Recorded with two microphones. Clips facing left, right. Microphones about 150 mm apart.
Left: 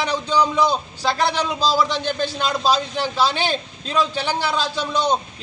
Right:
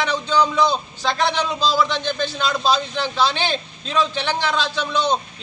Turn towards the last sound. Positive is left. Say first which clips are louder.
# even
turn(degrees=10)  # may be behind; listen again after turning